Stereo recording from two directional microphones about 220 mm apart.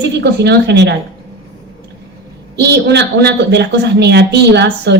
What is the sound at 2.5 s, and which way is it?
A woman's voice, 50° right (ahead or behind).